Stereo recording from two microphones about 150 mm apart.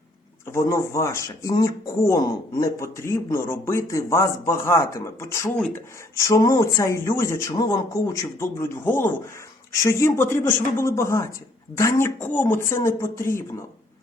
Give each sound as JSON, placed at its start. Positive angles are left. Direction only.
{"t": 0.4, "sound": "speech", "side_deg": 20}